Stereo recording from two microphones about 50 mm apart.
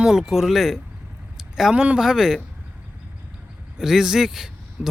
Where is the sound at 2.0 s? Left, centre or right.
Centre.